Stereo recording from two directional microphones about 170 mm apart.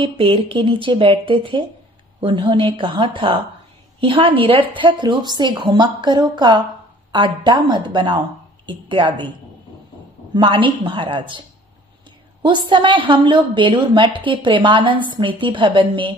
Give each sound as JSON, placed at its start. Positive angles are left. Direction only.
{"t": 0.0, "sound": "a woman's voice", "side_deg": -30}
{"t": 10.3, "sound": "a woman's voice", "side_deg": -30}